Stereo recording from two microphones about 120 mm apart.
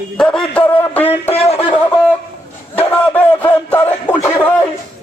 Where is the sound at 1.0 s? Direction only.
55° left (ahead or behind).